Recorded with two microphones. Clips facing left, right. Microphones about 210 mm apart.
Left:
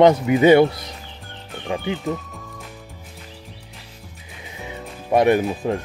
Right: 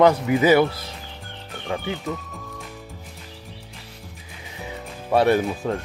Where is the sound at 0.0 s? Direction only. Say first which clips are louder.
Left 3 dB; 25° left (ahead or behind).